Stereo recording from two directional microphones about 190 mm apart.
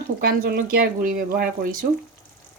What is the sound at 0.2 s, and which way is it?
Speech, 55° right (ahead or behind).